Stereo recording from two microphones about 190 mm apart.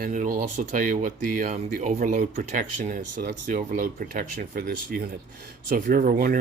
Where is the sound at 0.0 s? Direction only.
40° right (ahead or behind).